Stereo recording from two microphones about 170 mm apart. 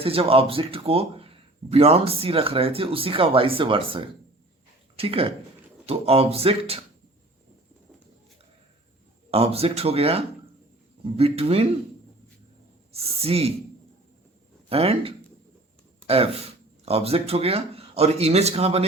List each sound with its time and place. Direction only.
0.0 s speech: 35° right (ahead or behind)
9.3 s speech: 35° right (ahead or behind)
12.9 s speech: 35° right (ahead or behind)
14.7 s speech: 35° right (ahead or behind)